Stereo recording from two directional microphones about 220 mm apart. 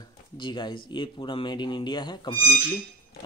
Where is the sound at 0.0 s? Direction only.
20° left (ahead or behind).